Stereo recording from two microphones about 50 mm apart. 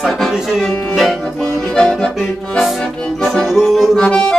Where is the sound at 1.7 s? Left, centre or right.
Centre.